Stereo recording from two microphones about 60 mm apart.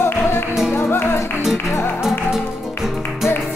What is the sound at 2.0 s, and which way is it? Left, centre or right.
Music, centre.